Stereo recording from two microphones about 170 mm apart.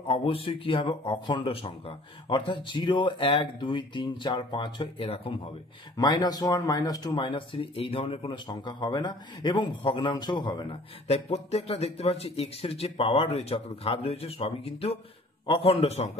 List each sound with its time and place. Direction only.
0.1 s a man's voice: 30° left (ahead or behind)